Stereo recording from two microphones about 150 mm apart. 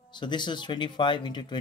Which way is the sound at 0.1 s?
30° left (ahead or behind).